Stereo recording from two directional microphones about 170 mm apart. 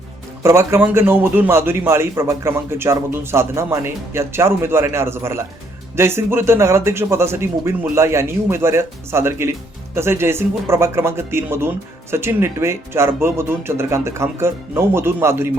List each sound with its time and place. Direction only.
0.4 s a man's voice: 15° right (ahead or behind)